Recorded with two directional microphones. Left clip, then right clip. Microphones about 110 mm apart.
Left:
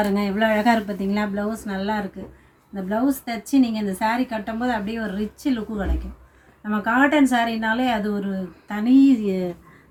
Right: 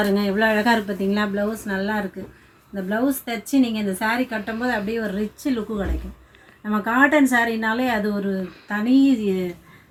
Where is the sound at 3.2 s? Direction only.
35° left (ahead or behind).